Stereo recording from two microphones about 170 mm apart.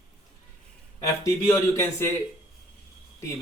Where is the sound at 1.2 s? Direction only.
15° left (ahead or behind).